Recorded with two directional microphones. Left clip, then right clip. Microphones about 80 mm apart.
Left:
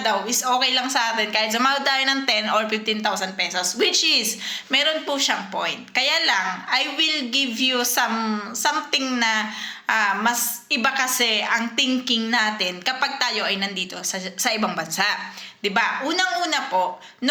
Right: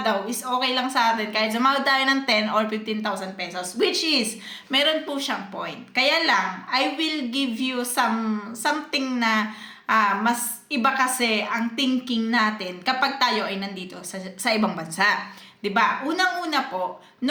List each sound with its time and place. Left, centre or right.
0.0 s a woman's voice: right
4.7 s a woman's voice: right